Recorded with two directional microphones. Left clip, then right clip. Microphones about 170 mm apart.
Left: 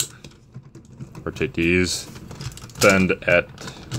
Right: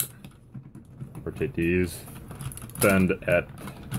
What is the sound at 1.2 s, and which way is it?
Speech, 40° left (ahead or behind).